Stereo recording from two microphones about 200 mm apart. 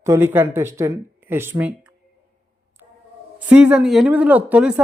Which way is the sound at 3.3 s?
5° right (ahead or behind).